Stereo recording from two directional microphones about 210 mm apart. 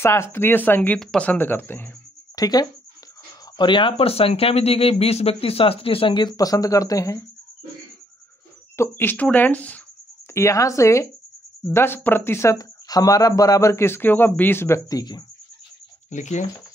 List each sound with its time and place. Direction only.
0.0 s speech: 10° left (ahead or behind)
8.7 s speech: 10° left (ahead or behind)
16.1 s speech: 35° left (ahead or behind)